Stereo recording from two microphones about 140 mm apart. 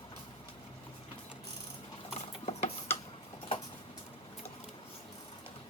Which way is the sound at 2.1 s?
50° left (ahead or behind).